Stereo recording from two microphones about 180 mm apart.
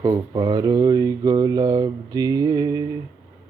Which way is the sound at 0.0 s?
25° right (ahead or behind).